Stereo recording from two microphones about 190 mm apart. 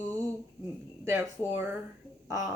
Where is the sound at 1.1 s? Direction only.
10° right (ahead or behind).